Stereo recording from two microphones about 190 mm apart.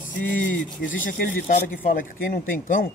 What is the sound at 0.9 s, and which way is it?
Speech, 45° left (ahead or behind).